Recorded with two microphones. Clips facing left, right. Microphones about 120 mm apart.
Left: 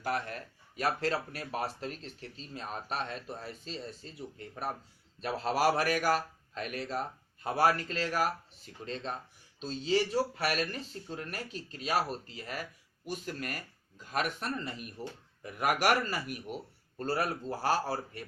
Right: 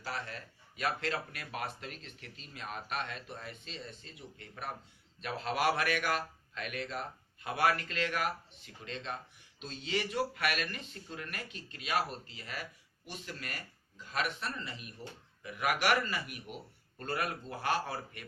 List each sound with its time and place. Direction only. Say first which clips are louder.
0.0 s speech: left 6 dB; 50° left (ahead or behind); by 18.2 s 35° left (ahead or behind)